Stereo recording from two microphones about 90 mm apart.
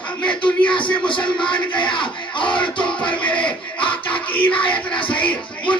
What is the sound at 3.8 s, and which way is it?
Music, 70° left (ahead or behind).